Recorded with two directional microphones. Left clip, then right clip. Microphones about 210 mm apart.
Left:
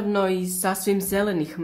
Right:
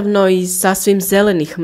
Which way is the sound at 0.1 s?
35° right (ahead or behind).